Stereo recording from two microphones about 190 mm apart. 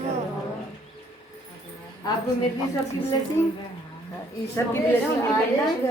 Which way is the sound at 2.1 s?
20° left (ahead or behind).